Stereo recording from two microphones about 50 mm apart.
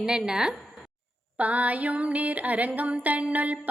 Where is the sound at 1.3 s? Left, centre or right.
Right.